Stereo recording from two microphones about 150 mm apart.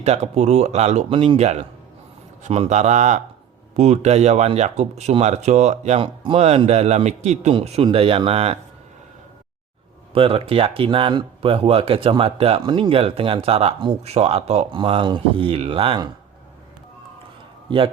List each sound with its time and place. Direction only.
0.0 s speech: 50° right (ahead or behind)
10.2 s speech: 40° right (ahead or behind)